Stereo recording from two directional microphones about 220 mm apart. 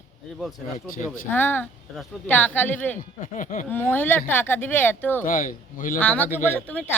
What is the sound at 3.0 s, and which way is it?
Speech, 35° left (ahead or behind).